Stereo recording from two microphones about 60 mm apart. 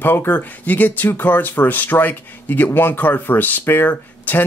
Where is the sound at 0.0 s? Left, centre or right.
Left.